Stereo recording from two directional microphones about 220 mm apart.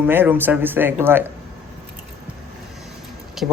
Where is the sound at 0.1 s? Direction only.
10° right (ahead or behind).